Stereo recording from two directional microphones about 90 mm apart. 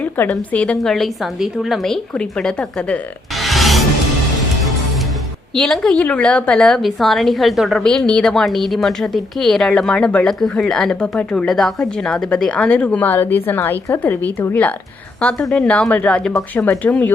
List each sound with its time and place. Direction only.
0.3 s a woman's voice: 10° left (ahead or behind)
3.3 s music: centre (ahead or behind)
5.5 s a woman's voice: 5° left (ahead or behind)
15.4 s a woman's voice: 5° left (ahead or behind)
15.7 s a woman's voice: 15° left (ahead or behind)